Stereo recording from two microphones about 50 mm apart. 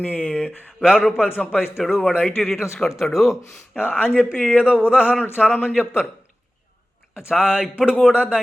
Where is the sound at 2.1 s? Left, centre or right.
Left.